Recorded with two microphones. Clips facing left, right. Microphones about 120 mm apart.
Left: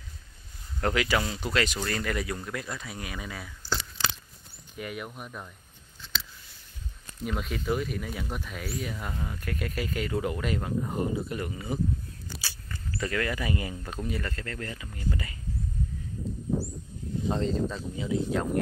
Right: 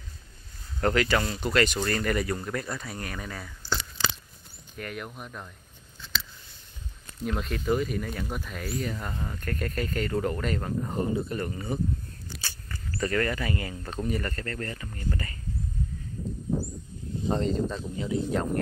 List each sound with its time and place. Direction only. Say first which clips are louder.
0.7 s speech: right 2 dB; 5° left (ahead or behind)
4.7 s speech: even; 5° left (ahead or behind)
7.2 s speech: right 2 dB; centre (ahead or behind)
12.4 s walk: even; 5° left (ahead or behind)
13.4 s speech: even; 20° left (ahead or behind)
13.9 s speech: right 5 dB; centre (ahead or behind)
17.3 s speech: right 2 dB; centre (ahead or behind)